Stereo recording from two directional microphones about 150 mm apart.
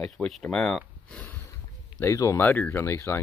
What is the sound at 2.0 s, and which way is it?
Speech, 20° left (ahead or behind).